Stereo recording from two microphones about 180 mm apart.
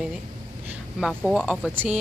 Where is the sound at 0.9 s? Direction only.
Centre (ahead or behind).